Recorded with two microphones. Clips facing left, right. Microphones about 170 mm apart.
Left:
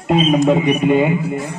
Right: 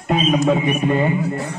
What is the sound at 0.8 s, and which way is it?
Speech, 10° left (ahead or behind).